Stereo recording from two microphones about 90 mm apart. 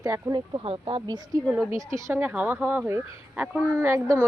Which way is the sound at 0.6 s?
80° right.